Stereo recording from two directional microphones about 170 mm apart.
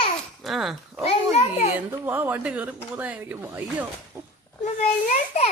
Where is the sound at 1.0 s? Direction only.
40° left (ahead or behind).